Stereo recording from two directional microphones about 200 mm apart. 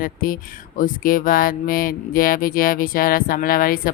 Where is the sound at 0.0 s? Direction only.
45° left (ahead or behind).